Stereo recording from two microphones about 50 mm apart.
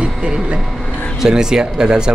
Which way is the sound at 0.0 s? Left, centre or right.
Right.